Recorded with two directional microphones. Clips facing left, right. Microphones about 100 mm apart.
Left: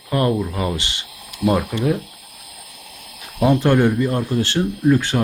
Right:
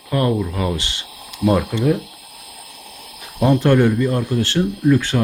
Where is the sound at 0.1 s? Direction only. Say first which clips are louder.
Even; 10° left (ahead or behind).